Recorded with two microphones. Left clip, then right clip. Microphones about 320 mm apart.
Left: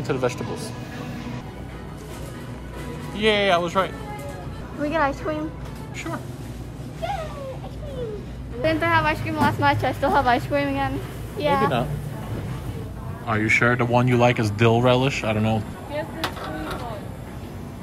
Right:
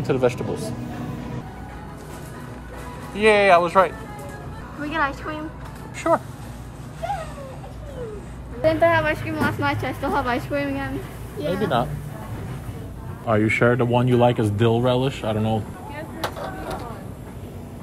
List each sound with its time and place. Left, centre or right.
0.0 s speech: centre
3.3 s speech: centre
4.8 s a woman's voice: left
6.0 s speech: centre
8.6 s speech: centre
13.3 s speech: centre
16.2 s a sound: centre